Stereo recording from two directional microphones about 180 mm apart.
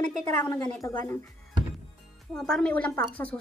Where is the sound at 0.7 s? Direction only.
15° left (ahead or behind).